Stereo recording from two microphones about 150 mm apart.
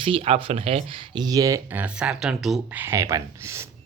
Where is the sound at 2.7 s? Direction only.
15° right (ahead or behind).